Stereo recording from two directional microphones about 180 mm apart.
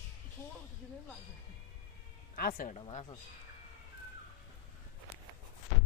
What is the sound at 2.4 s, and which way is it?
Speech, 55° left (ahead or behind).